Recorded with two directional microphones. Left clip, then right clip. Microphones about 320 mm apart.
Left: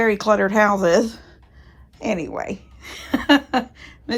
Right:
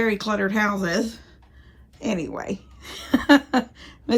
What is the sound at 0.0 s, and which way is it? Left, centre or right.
Speech, centre.